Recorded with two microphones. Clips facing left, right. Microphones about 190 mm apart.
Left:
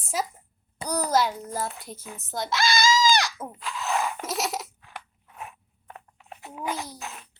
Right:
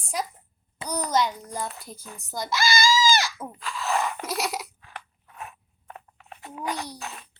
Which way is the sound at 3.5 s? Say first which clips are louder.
Right 1 dB; 5° left (ahead or behind).